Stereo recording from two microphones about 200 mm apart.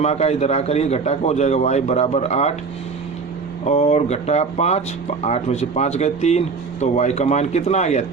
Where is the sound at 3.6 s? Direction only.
35° left (ahead or behind).